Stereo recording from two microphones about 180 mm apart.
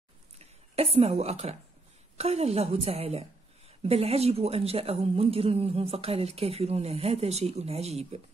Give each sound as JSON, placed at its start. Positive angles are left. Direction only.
{"t": 0.7, "sound": "a woman's voice", "side_deg": -35}